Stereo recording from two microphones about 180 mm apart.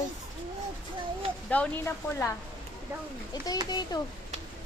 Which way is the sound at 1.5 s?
10° left (ahead or behind).